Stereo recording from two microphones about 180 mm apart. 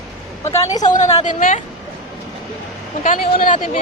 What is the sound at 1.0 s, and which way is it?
Speech, 40° left (ahead or behind).